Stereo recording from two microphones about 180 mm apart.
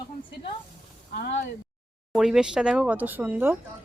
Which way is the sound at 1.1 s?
65° left (ahead or behind).